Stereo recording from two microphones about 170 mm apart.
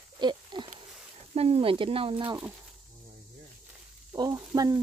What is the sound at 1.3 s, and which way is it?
Speech, 35° right (ahead or behind).